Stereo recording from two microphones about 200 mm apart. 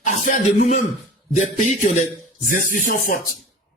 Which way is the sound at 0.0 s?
40° left (ahead or behind).